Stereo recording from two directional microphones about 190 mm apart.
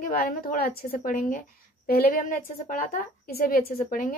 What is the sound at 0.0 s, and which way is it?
A woman's voice, 50° left (ahead or behind).